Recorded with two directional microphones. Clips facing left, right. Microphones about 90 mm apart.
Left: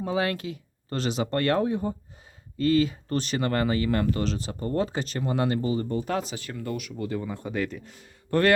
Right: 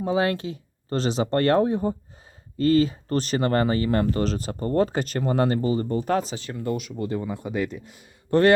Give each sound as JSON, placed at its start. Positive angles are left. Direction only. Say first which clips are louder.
{"t": 0.0, "sound": "speech", "louder": "right 4 dB", "side_deg": -25}
{"t": 7.3, "sound": "speech", "louder": "right 2 dB", "side_deg": -15}